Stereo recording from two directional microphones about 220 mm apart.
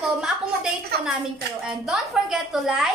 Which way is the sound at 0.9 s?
45° right (ahead or behind).